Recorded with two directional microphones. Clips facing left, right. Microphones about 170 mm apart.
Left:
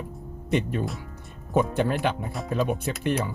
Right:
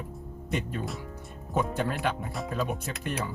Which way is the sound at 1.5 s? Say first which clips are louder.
Left 5 dB; 20° left (ahead or behind).